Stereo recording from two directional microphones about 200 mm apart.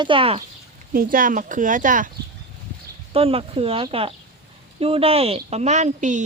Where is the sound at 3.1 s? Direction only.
30° right (ahead or behind).